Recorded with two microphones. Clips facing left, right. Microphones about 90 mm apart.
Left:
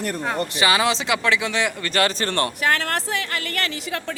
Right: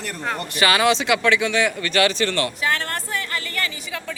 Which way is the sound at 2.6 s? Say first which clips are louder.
Left 4 dB; 55° left (ahead or behind).